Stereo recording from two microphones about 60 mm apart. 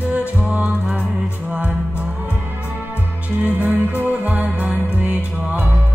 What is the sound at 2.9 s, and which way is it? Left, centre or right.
Music, right.